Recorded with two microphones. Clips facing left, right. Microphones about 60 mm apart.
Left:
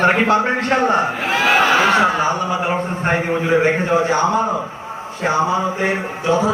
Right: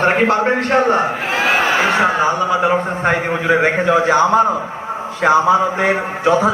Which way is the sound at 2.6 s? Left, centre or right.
Right.